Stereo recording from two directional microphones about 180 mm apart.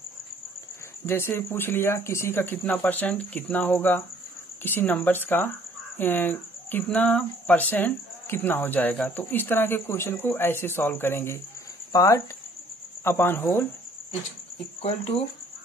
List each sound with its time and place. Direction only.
1.0 s speech: 15° left (ahead or behind)
14.8 s speech: 35° left (ahead or behind)